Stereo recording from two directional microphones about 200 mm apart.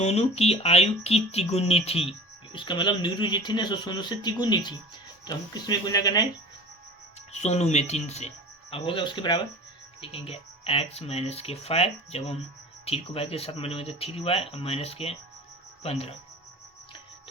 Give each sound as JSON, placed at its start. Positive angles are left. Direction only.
{"t": 0.0, "sound": "speech", "side_deg": 30}
{"t": 7.3, "sound": "speech", "side_deg": 35}